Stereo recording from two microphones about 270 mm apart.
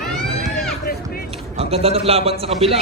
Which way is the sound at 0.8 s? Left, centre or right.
Left.